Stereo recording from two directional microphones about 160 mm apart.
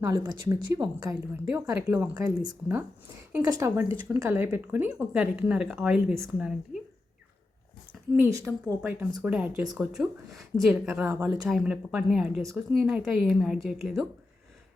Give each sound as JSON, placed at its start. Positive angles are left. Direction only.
{"t": 0.2, "sound": "speech", "side_deg": -25}
{"t": 1.3, "sound": "speech", "side_deg": -15}
{"t": 2.1, "sound": "speech", "side_deg": -25}
{"t": 8.3, "sound": "speech", "side_deg": -20}
{"t": 11.4, "sound": "speech", "side_deg": -5}